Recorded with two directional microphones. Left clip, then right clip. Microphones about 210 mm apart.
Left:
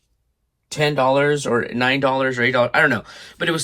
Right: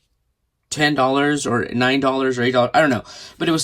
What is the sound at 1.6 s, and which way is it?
Speech, 30° right (ahead or behind).